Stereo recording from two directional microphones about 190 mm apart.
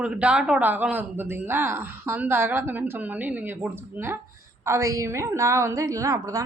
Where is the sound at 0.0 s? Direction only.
5° right (ahead or behind).